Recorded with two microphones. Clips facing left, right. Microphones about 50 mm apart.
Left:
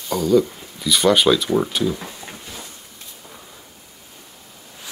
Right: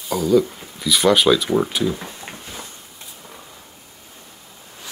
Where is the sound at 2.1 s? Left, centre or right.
Right.